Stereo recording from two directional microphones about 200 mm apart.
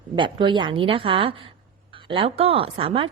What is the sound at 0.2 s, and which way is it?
A woman's voice, 25° right (ahead or behind).